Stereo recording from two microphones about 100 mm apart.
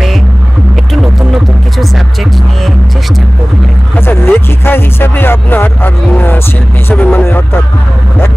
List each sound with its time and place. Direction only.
0.9 s music: centre (ahead or behind)
4.0 s music: 20° left (ahead or behind)
6.9 s vehicle: 20° left (ahead or behind)